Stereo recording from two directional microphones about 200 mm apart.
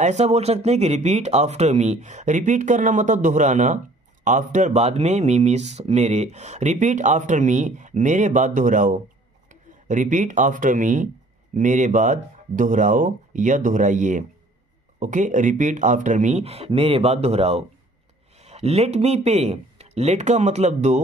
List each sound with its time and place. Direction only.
0.0 s speech: 35° right (ahead or behind)